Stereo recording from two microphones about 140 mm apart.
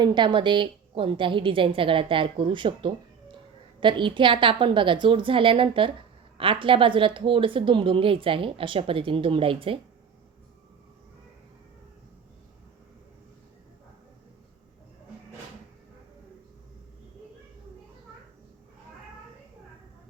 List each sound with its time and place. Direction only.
0.0 s a woman's voice: 35° right (ahead or behind)